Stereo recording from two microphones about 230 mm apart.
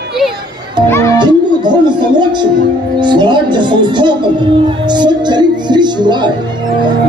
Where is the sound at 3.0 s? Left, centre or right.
Centre.